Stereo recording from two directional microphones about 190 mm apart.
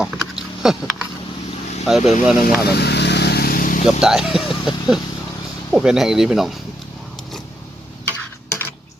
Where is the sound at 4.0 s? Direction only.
5° right (ahead or behind).